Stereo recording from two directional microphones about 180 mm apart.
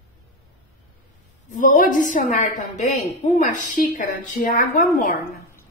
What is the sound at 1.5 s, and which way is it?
A woman's voice, 45° left (ahead or behind).